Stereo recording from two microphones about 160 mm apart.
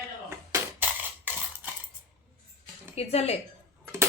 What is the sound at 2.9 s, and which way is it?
Speech, 40° left (ahead or behind).